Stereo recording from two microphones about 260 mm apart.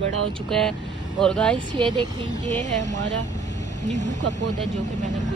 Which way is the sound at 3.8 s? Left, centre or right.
Right.